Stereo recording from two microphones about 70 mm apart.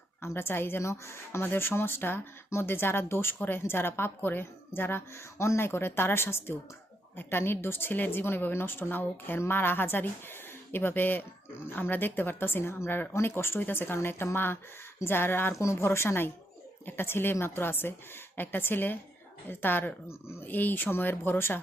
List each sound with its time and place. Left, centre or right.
0.2 s a woman's voice: left
15.5 s a woman's voice: left